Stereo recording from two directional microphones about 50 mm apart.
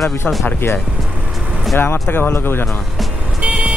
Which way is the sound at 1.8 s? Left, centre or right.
Left.